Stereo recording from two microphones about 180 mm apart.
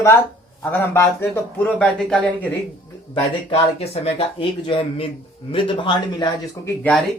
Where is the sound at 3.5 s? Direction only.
35° left (ahead or behind).